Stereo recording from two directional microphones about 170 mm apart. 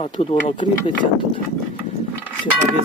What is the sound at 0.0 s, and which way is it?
Speech, 35° left (ahead or behind).